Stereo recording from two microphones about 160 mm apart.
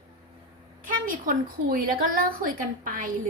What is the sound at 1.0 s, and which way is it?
A woman's voice, 60° right (ahead or behind).